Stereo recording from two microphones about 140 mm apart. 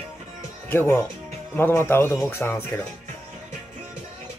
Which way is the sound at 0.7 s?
15° left (ahead or behind).